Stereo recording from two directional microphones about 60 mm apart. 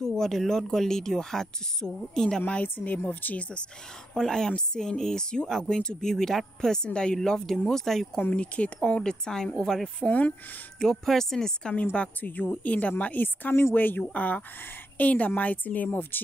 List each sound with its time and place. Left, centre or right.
0.0 s speech: centre
2.4 s speech: left
4.1 s speech: centre
8.2 s speech: centre
9.9 s speech: left
10.8 s speech: centre
11.7 s speech: left